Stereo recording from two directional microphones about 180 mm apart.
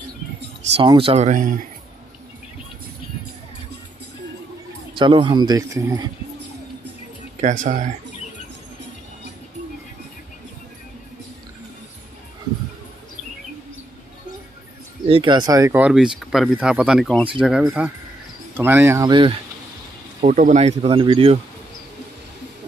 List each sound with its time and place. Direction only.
0.7 s speech: 30° right (ahead or behind); by 1.7 s 45° right (ahead or behind)
4.9 s speech: 25° right (ahead or behind)
7.6 s speech: 45° right (ahead or behind)
15.0 s speech: 30° right (ahead or behind)
15.8 s speech: 5° right (ahead or behind)
20.2 s speech: 40° right (ahead or behind)